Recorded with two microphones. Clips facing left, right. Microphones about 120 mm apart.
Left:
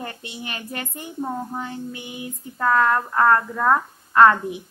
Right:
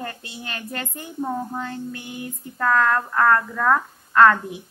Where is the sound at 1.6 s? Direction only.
15° left (ahead or behind).